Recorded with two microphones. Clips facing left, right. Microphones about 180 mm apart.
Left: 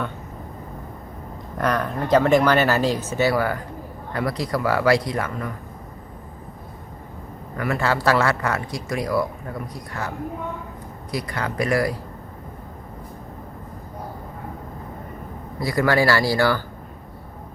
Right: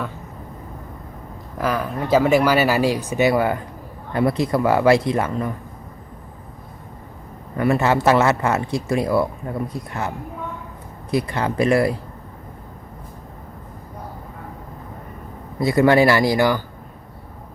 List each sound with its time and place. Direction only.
1.5 s speech: 5° right (ahead or behind); by 5.5 s 25° right (ahead or behind)
7.5 s speech: 25° right (ahead or behind)
11.1 s speech: 25° right (ahead or behind)
15.6 s speech: 25° right (ahead or behind)